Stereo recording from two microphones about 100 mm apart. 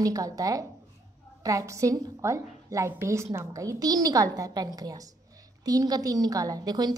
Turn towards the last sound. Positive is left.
turn(degrees=-40)  # may be behind; listen again after turning